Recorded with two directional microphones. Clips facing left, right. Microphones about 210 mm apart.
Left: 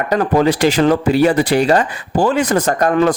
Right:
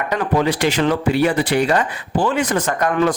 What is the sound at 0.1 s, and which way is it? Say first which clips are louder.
Speech: left 5 dB; 40° left (ahead or behind).